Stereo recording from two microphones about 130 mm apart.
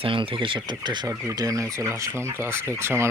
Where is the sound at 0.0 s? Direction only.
40° right (ahead or behind).